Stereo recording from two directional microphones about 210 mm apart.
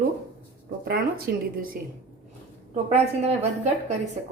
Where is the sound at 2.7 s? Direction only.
30° right (ahead or behind).